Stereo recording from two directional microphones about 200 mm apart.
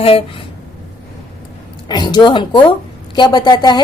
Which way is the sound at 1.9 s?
20° left (ahead or behind).